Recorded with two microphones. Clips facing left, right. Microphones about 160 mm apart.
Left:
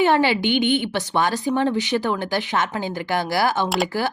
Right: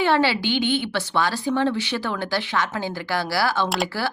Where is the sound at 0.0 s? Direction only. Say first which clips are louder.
Left 2 dB; 15° left (ahead or behind).